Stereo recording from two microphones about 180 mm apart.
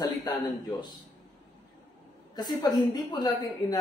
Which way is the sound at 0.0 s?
20° left (ahead or behind).